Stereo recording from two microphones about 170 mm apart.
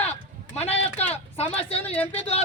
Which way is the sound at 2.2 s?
35° left (ahead or behind).